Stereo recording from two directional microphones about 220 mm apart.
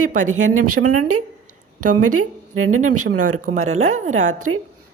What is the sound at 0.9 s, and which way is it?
Speech, 90° right.